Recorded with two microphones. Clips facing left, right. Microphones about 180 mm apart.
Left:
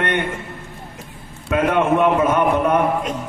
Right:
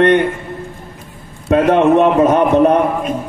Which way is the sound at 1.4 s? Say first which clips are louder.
Right 7 dB; 35° right (ahead or behind).